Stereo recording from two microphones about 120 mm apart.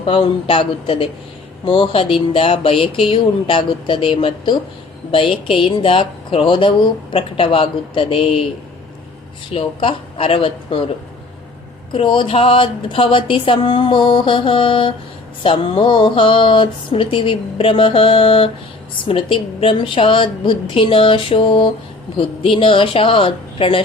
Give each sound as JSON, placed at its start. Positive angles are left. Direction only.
{"t": 0.0, "sound": "speech", "side_deg": 50}
{"t": 9.5, "sound": "speech", "side_deg": 50}
{"t": 11.9, "sound": "speech", "side_deg": 40}